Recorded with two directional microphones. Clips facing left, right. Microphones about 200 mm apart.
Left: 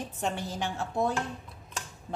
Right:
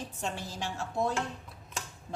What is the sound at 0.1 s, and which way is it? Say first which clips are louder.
A woman's voice: left 4 dB; 60° left (ahead or behind).